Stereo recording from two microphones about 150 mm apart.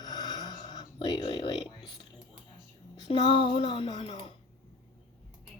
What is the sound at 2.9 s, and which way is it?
Speech, 30° left (ahead or behind).